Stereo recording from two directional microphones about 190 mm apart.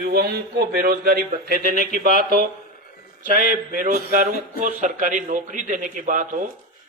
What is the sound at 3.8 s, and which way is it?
A man's voice, 45° right (ahead or behind).